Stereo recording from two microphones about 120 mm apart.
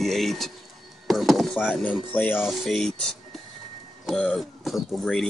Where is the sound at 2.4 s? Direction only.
Centre (ahead or behind).